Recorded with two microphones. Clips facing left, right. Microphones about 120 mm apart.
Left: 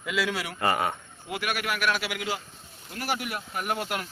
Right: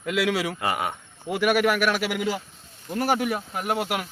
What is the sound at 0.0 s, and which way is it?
Speech, 55° right (ahead or behind).